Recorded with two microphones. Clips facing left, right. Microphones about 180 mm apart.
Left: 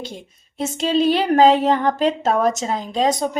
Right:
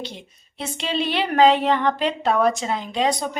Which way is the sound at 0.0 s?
45° left (ahead or behind).